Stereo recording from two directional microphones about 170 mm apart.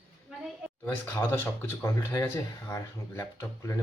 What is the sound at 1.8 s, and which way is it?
Speech, 15° left (ahead or behind).